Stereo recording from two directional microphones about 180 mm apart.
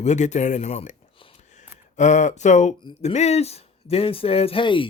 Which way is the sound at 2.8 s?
30° left (ahead or behind).